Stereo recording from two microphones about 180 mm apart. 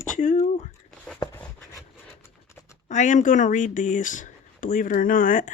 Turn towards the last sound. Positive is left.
turn(degrees=45)  # may be behind; listen again after turning